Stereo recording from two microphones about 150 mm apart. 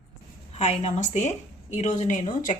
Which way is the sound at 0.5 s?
45° left (ahead or behind).